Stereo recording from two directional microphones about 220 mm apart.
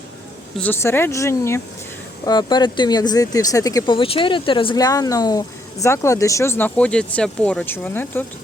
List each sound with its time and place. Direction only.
0.6 s speech: 10° left (ahead or behind)